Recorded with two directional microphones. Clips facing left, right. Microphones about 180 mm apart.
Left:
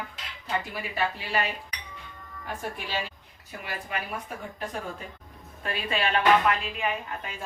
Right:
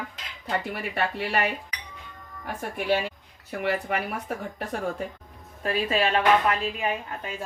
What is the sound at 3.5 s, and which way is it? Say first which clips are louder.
Speech: right 10 dB; 70° right (ahead or behind).